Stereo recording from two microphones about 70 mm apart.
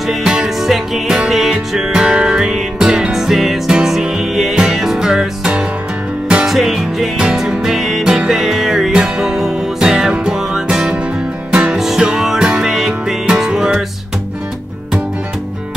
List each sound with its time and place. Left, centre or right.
0.0 s music: centre